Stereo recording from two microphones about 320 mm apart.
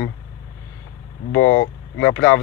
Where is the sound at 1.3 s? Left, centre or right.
Left.